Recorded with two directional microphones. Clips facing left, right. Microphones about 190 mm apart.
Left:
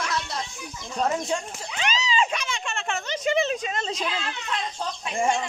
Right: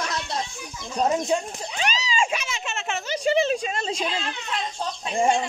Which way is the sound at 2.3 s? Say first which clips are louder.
Right 1 dB; 5° right (ahead or behind).